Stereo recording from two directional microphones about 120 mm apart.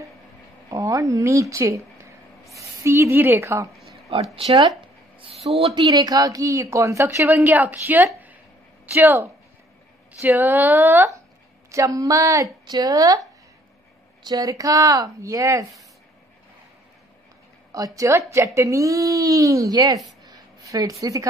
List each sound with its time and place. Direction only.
0.7 s a woman's voice: 25° right (ahead or behind)
3.7 s a sound: centre (ahead or behind)
4.1 s speech: 55° right (ahead or behind)
5.2 s a sound: 55° right (ahead or behind)
5.8 s a woman's voice: 35° right (ahead or behind); by 11.1 s 15° right (ahead or behind)
11.7 s a woman's voice: 30° right (ahead or behind)
17.7 s a woman's voice: 30° right (ahead or behind)
20.2 s a sound: 30° right (ahead or behind)
21.0 s a woman's voice: 25° right (ahead or behind)